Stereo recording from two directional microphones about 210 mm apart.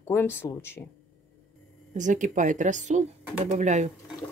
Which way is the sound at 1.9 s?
35° right (ahead or behind).